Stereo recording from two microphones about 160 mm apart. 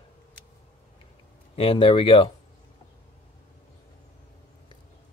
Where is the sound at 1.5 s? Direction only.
35° left (ahead or behind).